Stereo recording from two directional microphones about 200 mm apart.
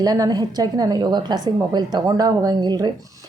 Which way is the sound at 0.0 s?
20° right (ahead or behind).